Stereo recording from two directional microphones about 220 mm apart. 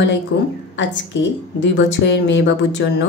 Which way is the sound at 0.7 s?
55° left (ahead or behind).